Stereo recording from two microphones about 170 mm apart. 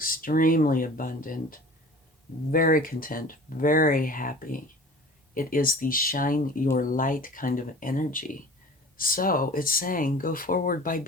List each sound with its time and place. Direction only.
0.0 s speech: 55° left (ahead or behind)